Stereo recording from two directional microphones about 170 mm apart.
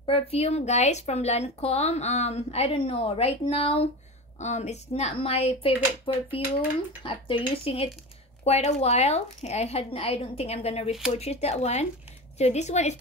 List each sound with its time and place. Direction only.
0.0 s speech: 35° left (ahead or behind)